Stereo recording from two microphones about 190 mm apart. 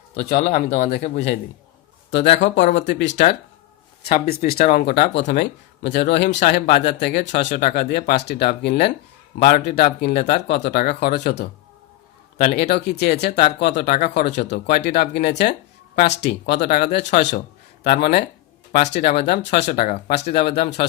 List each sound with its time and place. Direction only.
0.3 s speech: 45° left (ahead or behind)
2.7 s speech: 70° left (ahead or behind)
4.0 s speech: 50° left (ahead or behind)